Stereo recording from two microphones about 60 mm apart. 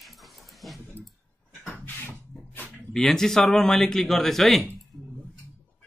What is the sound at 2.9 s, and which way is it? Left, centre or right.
A man's voice, centre.